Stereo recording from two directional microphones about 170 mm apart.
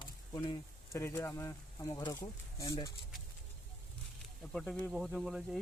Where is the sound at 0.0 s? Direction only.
25° left (ahead or behind).